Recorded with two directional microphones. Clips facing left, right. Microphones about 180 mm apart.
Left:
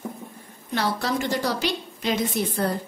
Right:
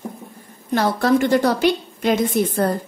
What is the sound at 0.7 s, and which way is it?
A woman's voice, 50° right (ahead or behind).